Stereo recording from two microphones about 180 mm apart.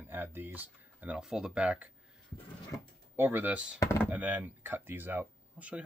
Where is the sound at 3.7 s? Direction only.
15° left (ahead or behind).